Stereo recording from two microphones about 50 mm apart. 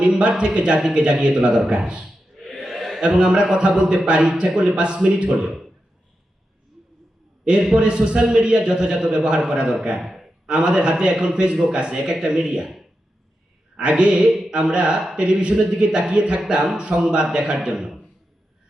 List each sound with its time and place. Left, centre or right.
0.0 s a man's voice: centre
1.6 s a man's voice: centre
2.0 s a sound: centre
3.0 s a man's voice: centre
5.5 s a man's voice: centre
7.6 s a man's voice: centre
10.0 s a sound: centre
10.4 s a man's voice: centre
13.7 s a man's voice: right
14.3 s a sound: centre
14.5 s a man's voice: centre